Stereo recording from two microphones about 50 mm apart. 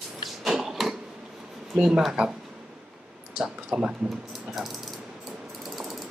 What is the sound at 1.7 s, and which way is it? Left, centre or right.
Speech, centre.